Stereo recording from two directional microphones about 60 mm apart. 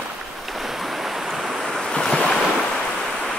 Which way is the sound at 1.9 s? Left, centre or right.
Centre.